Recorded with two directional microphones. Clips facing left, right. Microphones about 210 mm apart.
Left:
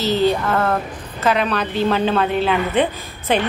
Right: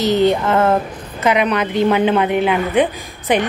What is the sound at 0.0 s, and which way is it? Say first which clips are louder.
A woman's voice: right 3 dB; 20° right (ahead or behind).